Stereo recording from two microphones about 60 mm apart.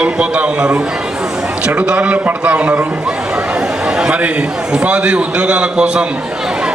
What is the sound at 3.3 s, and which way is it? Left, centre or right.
A man's voice, centre.